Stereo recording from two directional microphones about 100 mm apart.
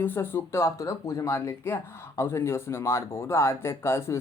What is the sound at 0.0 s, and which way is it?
Speech, 20° left (ahead or behind).